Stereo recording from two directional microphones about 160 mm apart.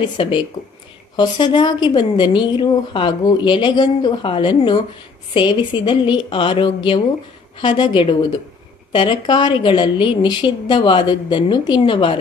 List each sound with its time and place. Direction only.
0.2 s a woman's voice: 35° left (ahead or behind)